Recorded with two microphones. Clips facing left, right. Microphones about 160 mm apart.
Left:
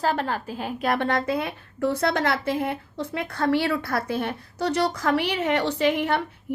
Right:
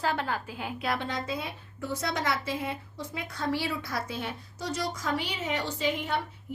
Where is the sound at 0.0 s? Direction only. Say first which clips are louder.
Left 5 dB; 40° left (ahead or behind).